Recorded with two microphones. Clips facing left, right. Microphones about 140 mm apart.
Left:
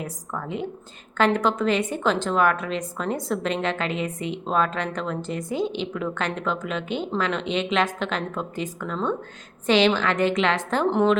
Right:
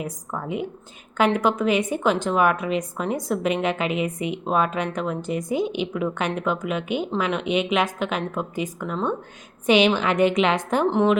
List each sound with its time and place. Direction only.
0.0 s a woman's voice: 15° right (ahead or behind)
10.8 s a woman's voice: centre (ahead or behind)